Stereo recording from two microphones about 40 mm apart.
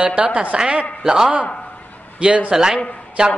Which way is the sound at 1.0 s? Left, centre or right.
Centre.